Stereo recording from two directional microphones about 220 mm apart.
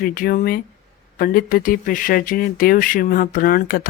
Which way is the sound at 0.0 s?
40° left (ahead or behind).